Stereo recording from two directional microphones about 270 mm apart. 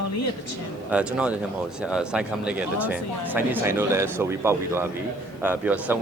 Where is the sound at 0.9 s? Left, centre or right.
Centre.